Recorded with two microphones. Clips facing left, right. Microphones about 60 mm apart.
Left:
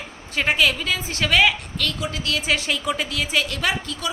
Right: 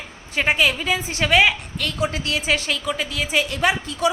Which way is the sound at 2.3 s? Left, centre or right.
Centre.